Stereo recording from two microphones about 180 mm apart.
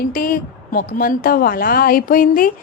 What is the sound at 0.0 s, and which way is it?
A woman's voice, 50° left (ahead or behind).